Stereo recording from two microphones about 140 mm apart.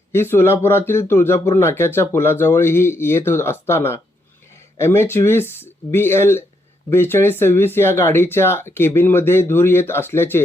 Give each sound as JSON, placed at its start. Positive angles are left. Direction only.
{"t": 0.1, "sound": "speech", "side_deg": 15}